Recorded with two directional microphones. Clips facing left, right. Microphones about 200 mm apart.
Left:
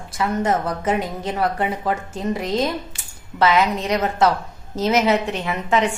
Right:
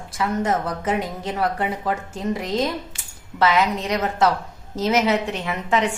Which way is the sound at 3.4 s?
25° left (ahead or behind).